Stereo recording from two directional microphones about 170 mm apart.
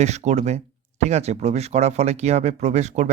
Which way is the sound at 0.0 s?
40° right (ahead or behind).